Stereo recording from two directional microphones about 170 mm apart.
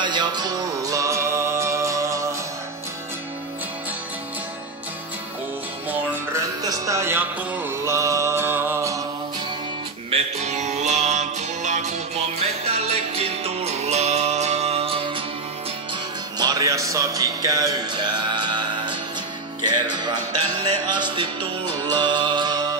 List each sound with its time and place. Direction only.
0.0 s music: 25° right (ahead or behind)
6.6 s music: 20° right (ahead or behind)
10.1 s music: 40° right (ahead or behind); by 22.7 s 25° right (ahead or behind)